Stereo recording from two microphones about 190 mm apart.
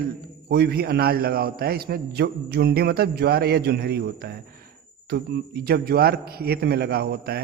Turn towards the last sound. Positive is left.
turn(degrees=-60)  # may be behind; listen again after turning